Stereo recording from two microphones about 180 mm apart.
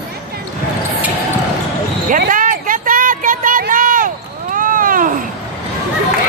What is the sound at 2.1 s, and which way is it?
Basketball bounce, 50° right (ahead or behind).